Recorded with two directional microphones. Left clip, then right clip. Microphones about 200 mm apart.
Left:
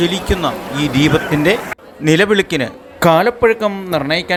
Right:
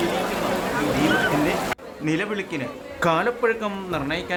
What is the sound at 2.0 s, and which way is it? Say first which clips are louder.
A man's voice: left 14 dB; 35° left (ahead or behind).